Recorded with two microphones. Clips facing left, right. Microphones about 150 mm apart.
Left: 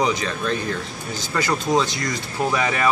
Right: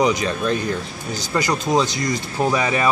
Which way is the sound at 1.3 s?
15° right (ahead or behind).